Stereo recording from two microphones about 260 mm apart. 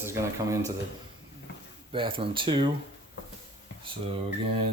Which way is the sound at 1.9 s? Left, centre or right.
Centre.